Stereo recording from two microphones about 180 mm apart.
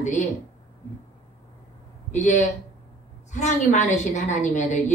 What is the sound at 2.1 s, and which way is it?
A woman's voice, 40° left (ahead or behind).